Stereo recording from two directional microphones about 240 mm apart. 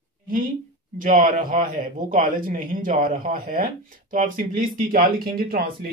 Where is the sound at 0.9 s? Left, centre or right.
Right.